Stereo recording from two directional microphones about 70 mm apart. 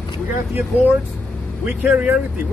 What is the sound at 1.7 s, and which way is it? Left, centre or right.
Speech, right.